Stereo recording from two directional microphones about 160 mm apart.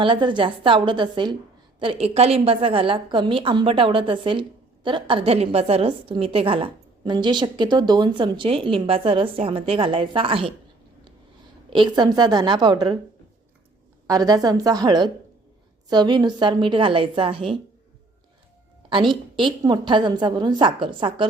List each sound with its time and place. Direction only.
0.0 s a woman's voice: 30° right (ahead or behind)
11.7 s a woman's voice: 30° right (ahead or behind)
14.1 s a woman's voice: 25° right (ahead or behind)
19.4 s a woman's voice: 30° right (ahead or behind)